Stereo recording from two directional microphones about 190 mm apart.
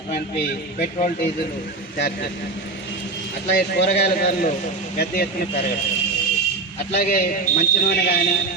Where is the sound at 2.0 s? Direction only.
55° left (ahead or behind).